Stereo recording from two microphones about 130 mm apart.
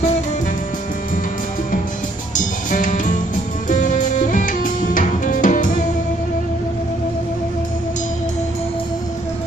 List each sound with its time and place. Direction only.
2.3 s music: 75° left (ahead or behind)